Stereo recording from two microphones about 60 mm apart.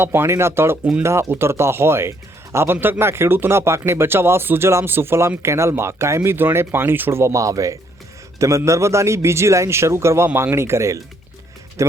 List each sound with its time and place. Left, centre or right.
0.0 s speech: right
7.2 s speech: right